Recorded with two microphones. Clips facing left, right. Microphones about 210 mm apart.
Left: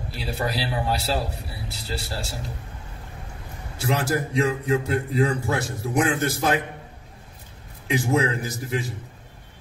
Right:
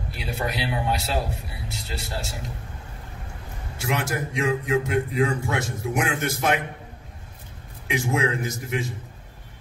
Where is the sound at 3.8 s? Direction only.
35° left (ahead or behind).